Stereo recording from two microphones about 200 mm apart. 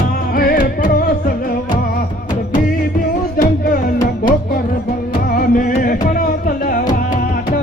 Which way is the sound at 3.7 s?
45° left (ahead or behind).